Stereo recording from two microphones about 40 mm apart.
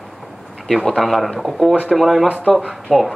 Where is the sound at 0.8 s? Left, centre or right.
Centre.